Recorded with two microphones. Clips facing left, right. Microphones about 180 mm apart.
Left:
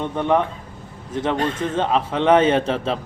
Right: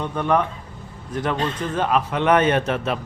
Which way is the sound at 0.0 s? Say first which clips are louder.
Left 1 dB; 20° left (ahead or behind).